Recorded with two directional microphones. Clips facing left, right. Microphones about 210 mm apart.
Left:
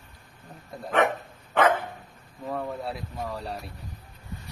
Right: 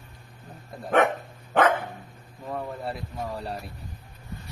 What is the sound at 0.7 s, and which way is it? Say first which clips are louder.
Speech: left 1 dB; 5° right (ahead or behind).